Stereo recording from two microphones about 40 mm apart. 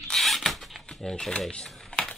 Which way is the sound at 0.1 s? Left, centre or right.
Centre.